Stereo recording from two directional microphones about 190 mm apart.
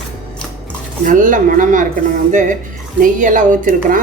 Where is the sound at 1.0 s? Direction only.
45° right (ahead or behind).